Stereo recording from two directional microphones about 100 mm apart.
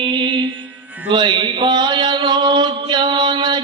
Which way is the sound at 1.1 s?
50° right (ahead or behind).